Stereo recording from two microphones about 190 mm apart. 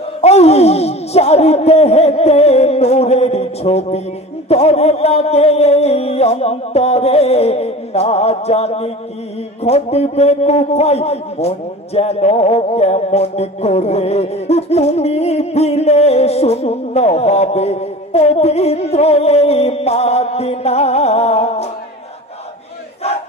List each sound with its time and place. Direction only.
0.2 s a man's voice: 35° left (ahead or behind)